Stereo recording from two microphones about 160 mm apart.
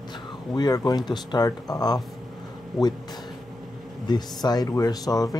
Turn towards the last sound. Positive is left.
turn(degrees=25)  # may be behind; listen again after turning